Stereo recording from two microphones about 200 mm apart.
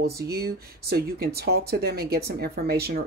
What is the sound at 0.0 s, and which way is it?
Speech, 50° right (ahead or behind).